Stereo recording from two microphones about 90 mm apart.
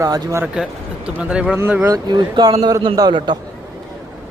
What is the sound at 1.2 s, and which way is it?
Speech, 10° right (ahead or behind).